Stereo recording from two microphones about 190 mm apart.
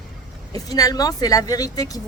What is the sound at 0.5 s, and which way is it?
A woman's voice, 20° left (ahead or behind).